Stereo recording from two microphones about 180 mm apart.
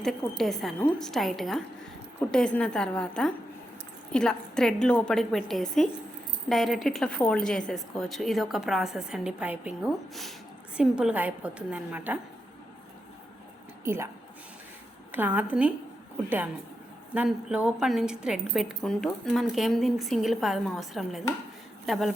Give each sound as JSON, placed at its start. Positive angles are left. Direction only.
{"t": 0.0, "sound": "a woman's voice", "side_deg": 0}
{"t": 13.8, "sound": "a woman's voice", "side_deg": -15}
{"t": 15.1, "sound": "a woman's voice", "side_deg": -10}
{"t": 17.2, "sound": "a woman's voice", "side_deg": -5}